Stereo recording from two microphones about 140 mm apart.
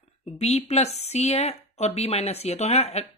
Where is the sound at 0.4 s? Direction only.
50° left (ahead or behind).